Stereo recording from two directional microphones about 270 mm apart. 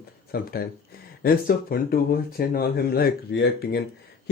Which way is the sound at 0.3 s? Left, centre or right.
Left.